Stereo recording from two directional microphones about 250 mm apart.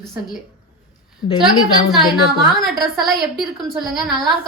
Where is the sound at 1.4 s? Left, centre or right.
Centre.